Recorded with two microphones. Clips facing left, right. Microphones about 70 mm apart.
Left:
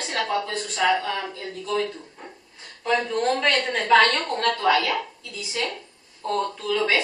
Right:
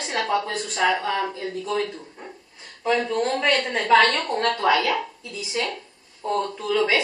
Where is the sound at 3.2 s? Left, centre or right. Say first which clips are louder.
Even; centre.